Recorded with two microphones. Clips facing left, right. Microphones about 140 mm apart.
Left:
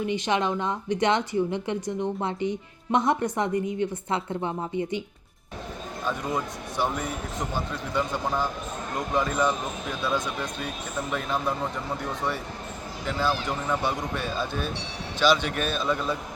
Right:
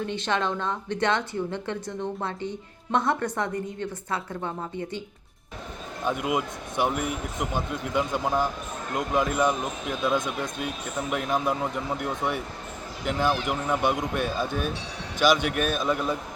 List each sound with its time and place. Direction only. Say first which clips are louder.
0.0 s speech: left 2 dB; 15° left (ahead or behind)
6.1 s speech: right 3 dB; 15° right (ahead or behind)
11.1 s speech: right 2 dB; 10° right (ahead or behind)
13.1 s speech: right 2 dB; 15° right (ahead or behind)